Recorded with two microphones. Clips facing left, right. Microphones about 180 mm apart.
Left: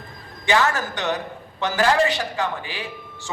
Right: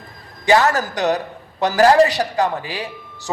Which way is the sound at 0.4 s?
40° right (ahead or behind).